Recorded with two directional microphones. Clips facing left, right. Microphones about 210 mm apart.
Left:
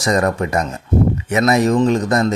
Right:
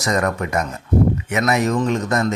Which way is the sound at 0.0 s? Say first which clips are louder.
Left 3 dB; 30° left (ahead or behind).